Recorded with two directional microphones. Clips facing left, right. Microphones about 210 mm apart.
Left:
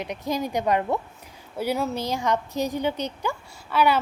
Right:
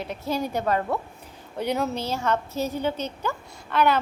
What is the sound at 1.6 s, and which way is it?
Speech, 5° left (ahead or behind).